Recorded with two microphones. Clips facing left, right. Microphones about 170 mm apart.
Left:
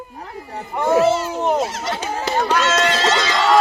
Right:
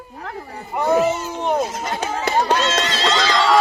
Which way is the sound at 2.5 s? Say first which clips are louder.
Left 2 dB; 30° right (ahead or behind).